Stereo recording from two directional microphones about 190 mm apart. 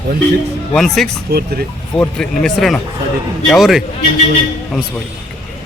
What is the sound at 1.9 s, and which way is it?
Speech, 5° left (ahead or behind).